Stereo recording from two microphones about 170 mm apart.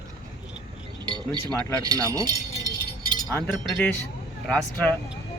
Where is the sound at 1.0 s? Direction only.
25° right (ahead or behind).